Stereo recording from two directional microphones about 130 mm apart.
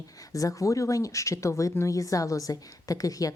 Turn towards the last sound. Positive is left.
turn(degrees=25)  # may be behind; listen again after turning